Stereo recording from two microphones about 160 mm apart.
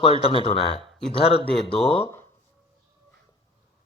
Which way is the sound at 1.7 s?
5° left (ahead or behind).